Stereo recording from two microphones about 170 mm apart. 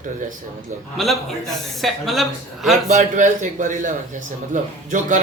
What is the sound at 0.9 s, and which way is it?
A man's voice, centre (ahead or behind).